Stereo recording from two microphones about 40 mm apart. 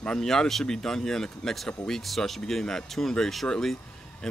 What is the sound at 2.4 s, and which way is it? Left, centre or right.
Speech, centre.